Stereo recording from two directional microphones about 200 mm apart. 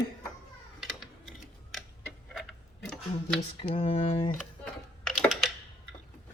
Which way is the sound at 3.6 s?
30° left (ahead or behind).